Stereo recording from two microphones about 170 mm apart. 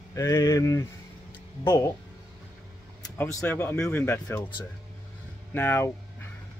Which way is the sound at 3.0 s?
15° left (ahead or behind).